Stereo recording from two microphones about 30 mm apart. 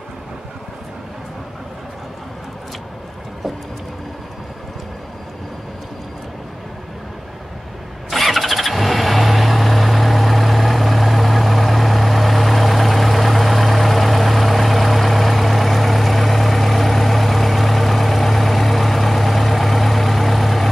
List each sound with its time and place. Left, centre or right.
8.1 s vehicle: centre